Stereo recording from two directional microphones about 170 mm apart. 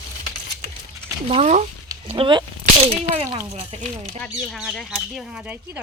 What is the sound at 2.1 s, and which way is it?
Speech, 30° right (ahead or behind).